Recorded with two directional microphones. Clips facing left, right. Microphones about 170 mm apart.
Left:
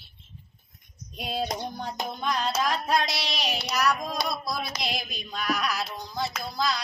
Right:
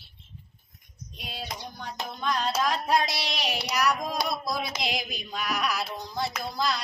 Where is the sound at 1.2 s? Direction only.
50° left (ahead or behind).